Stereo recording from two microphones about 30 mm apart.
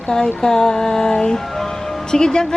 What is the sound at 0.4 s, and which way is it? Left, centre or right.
Speech, left.